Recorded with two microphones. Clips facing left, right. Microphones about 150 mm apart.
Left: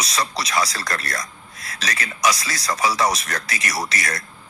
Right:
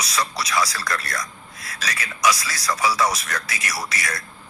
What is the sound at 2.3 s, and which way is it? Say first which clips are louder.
Speech: even; 30° left (ahead or behind).